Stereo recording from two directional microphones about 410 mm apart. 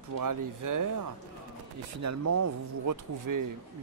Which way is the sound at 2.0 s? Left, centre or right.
Right.